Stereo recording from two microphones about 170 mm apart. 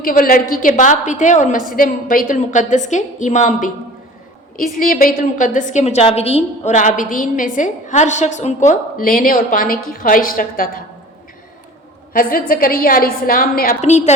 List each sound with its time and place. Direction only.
0.0 s a woman's voice: 55° left (ahead or behind)
12.1 s a woman's voice: 55° left (ahead or behind)